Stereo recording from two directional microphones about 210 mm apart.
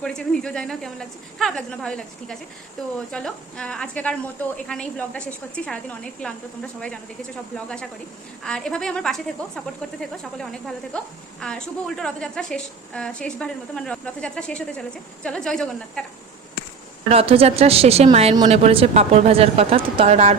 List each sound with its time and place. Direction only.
0.0 s a woman's voice: 5° left (ahead or behind)
17.1 s speech: 25° right (ahead or behind)